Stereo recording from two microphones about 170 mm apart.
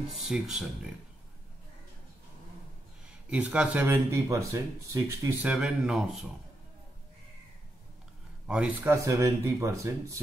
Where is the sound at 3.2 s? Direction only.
5° right (ahead or behind).